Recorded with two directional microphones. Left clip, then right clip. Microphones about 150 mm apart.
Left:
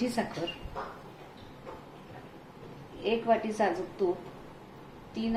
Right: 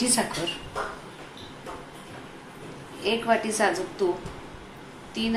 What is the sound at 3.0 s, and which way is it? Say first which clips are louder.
Speech: right 4 dB; 30° left (ahead or behind).